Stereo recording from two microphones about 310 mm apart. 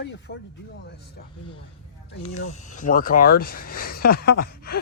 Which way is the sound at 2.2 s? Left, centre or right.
Left.